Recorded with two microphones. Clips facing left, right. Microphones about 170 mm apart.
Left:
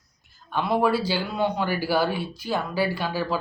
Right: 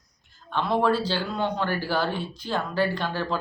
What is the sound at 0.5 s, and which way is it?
Speech, 10° left (ahead or behind).